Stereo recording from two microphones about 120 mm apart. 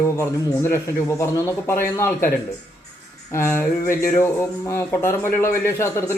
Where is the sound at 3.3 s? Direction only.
20° left (ahead or behind).